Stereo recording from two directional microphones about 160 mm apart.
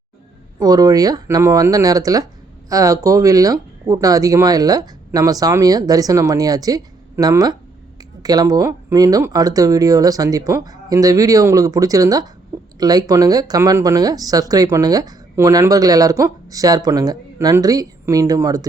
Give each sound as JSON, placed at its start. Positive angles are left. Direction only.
{"t": 0.6, "sound": "speech", "side_deg": -25}